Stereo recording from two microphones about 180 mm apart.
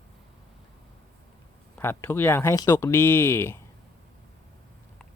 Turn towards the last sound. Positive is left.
turn(degrees=15)  # may be behind; listen again after turning